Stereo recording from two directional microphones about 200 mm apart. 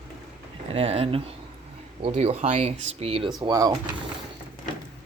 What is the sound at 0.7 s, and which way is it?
Speech, 30° right (ahead or behind).